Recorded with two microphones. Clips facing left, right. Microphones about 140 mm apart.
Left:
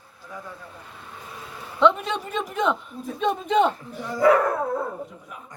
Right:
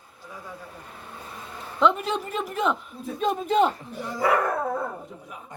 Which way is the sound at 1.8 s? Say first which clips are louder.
Left 2 dB; 5° right (ahead or behind).